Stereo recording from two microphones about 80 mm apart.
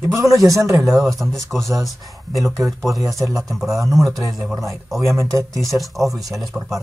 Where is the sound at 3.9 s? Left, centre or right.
Right.